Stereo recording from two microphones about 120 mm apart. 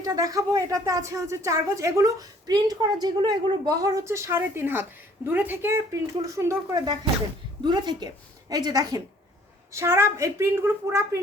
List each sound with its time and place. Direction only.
0.0 s a woman's voice: 30° right (ahead or behind)
7.6 s a woman's voice: 35° right (ahead or behind)
9.7 s a woman's voice: 20° right (ahead or behind)